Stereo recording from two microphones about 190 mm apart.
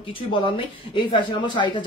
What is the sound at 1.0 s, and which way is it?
Speech, 25° left (ahead or behind).